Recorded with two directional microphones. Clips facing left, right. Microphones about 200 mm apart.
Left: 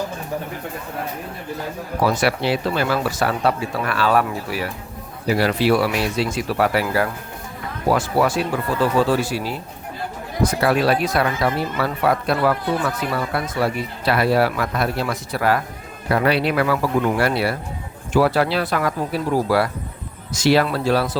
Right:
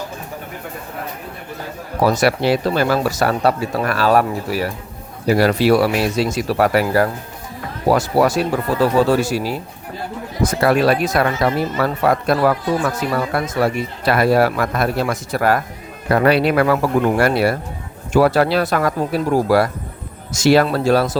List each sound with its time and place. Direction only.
2.0 s speech: 40° right (ahead or behind)
10.4 s speech: 45° right (ahead or behind)